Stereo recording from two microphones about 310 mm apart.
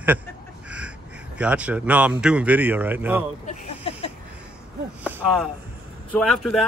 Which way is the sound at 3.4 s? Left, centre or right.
Centre.